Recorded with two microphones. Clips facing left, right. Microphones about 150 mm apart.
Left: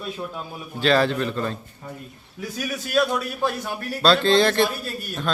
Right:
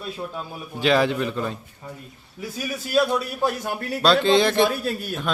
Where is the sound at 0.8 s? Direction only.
15° right (ahead or behind).